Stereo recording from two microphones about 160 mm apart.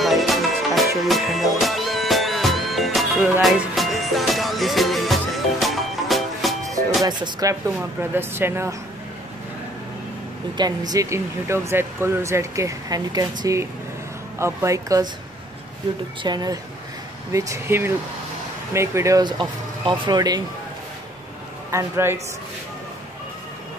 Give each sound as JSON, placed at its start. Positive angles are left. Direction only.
{"t": 0.0, "sound": "music", "side_deg": 0}
{"t": 7.1, "sound": "speech", "side_deg": -25}
{"t": 10.6, "sound": "speech", "side_deg": -25}
{"t": 16.2, "sound": "speech", "side_deg": -25}
{"t": 21.6, "sound": "speech", "side_deg": -15}